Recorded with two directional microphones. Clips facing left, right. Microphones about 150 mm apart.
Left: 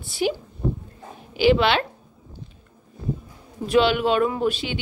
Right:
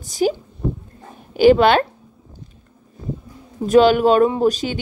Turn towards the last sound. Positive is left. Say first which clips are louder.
# right 6 dB
turn(degrees=-40)  # may be behind; listen again after turning